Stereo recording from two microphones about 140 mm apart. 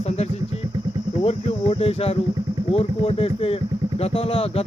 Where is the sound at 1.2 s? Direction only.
45° left (ahead or behind).